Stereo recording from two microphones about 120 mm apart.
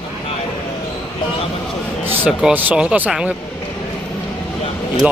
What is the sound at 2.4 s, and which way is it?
Speech, 10° right (ahead or behind).